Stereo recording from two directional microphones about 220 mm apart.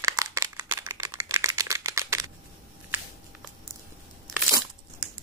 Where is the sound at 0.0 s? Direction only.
15° right (ahead or behind).